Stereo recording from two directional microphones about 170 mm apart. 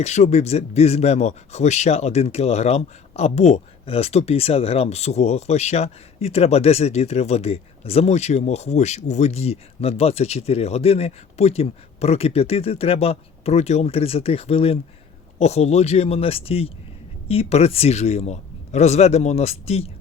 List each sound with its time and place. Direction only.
0.0 s speech: 40° left (ahead or behind)